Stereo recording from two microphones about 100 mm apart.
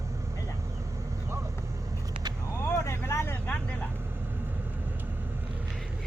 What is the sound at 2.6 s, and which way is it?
Vehicle, 30° left (ahead or behind).